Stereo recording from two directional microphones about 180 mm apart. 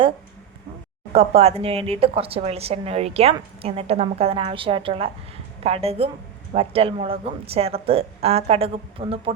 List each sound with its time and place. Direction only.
1.1 s speech: 35° right (ahead or behind)